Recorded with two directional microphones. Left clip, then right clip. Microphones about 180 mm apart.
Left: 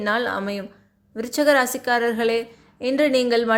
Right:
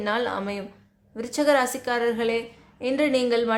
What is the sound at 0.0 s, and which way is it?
A woman's voice, 20° left (ahead or behind).